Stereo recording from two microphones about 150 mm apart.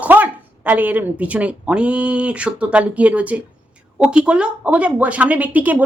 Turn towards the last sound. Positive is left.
turn(degrees=-10)  # may be behind; listen again after turning